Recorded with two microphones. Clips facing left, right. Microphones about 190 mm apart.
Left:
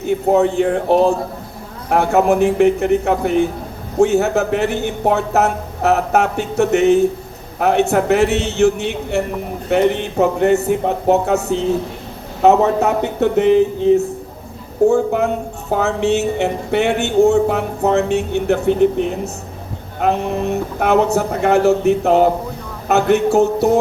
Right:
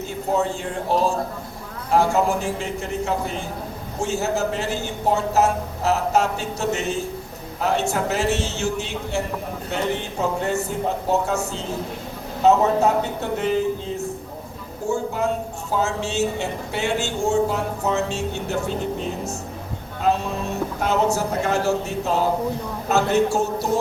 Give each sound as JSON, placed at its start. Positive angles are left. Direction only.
{"t": 0.0, "sound": "speech", "side_deg": 60}
{"t": 14.8, "sound": "speech", "side_deg": 60}